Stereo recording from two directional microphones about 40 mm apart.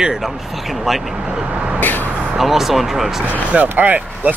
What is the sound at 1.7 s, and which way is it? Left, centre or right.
Vehicle, left.